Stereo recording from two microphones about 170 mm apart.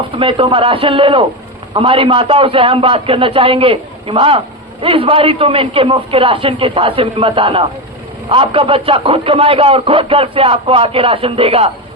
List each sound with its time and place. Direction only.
0.2 s a man's voice: 30° right (ahead or behind)